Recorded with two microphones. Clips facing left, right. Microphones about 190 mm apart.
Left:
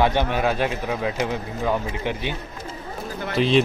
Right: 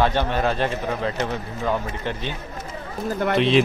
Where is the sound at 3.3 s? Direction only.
Centre (ahead or behind).